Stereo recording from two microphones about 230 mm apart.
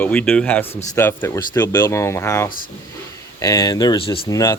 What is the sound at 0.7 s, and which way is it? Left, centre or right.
Speech, left.